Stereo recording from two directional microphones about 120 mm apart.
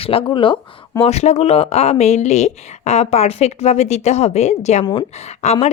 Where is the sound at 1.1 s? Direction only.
65° left (ahead or behind).